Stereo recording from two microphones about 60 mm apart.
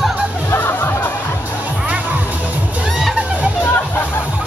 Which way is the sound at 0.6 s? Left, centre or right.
Left.